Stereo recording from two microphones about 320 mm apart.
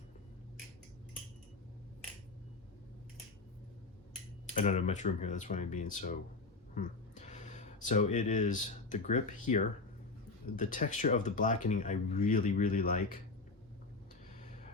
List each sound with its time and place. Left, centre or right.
4.5 s speech: left
6.7 s a sound: left
8.1 s speech: left